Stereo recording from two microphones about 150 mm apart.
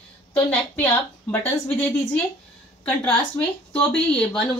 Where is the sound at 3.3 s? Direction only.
5° left (ahead or behind).